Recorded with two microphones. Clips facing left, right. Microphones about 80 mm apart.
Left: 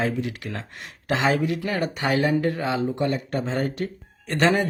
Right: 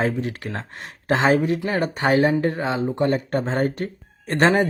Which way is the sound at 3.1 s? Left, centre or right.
Right.